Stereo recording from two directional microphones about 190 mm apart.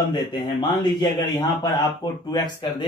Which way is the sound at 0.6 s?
25° left (ahead or behind).